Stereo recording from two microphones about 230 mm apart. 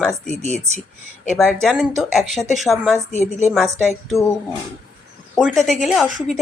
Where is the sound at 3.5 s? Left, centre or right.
Centre.